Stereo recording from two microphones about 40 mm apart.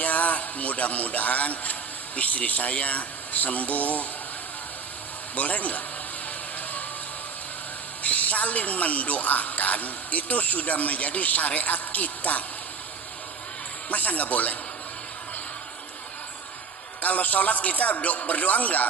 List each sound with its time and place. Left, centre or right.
0.0 s music: left
2.1 s speech: left
5.4 s speech: left
8.0 s a woman's voice: left
13.9 s a woman's voice: left
17.0 s a woman's voice: left